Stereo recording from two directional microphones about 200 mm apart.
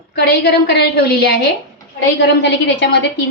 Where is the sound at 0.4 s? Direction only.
55° left (ahead or behind).